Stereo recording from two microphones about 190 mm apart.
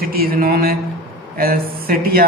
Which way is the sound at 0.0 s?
50° right (ahead or behind).